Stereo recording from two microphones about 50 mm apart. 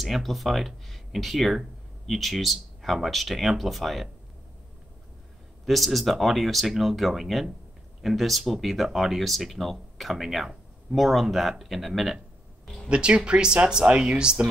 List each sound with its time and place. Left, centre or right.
0.0 s speech: centre
5.7 s speech: centre
12.8 s speech: centre